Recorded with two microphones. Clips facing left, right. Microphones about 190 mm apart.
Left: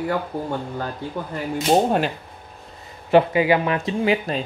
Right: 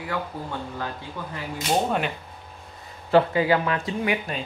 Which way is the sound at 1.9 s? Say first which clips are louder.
Left 5 dB; 35° left (ahead or behind).